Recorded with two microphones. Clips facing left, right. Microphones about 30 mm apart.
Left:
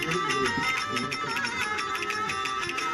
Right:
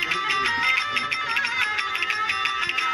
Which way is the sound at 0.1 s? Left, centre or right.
Right.